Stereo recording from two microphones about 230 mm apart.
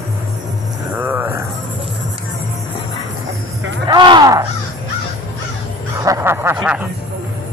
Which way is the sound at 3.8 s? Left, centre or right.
Centre.